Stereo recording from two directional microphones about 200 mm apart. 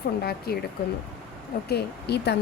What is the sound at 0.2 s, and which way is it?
Speech, 50° left (ahead or behind).